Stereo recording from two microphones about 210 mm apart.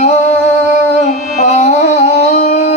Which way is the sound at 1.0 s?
35° left (ahead or behind).